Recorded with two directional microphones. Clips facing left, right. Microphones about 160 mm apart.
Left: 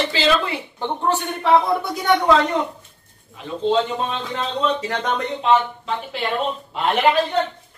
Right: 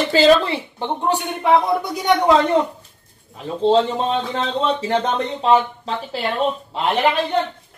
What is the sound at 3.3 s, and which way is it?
Speech, 35° right (ahead or behind).